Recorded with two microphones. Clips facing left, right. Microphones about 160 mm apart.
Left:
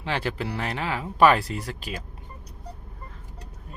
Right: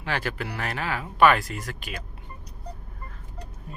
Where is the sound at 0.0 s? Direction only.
25° left (ahead or behind).